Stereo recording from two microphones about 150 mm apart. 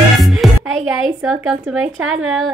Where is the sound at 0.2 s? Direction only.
Centre (ahead or behind).